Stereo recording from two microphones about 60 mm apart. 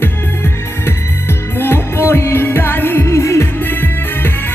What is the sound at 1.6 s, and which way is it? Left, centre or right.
Music, left.